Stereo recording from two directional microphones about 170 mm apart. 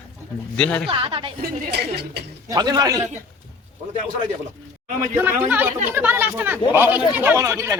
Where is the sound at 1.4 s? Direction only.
75° right (ahead or behind).